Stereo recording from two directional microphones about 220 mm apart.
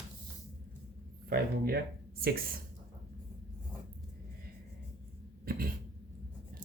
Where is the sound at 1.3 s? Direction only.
45° right (ahead or behind).